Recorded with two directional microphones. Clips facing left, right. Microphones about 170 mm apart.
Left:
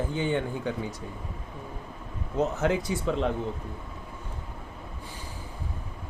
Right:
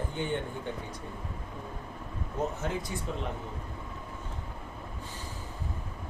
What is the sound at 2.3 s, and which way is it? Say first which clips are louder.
Speech: left 7 dB; 85° left.